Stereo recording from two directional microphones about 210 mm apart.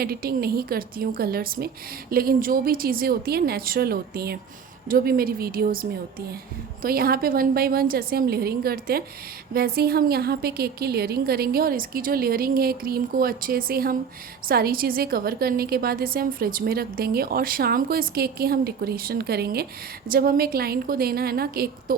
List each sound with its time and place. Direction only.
0.0 s a woman's voice: 45° right (ahead or behind)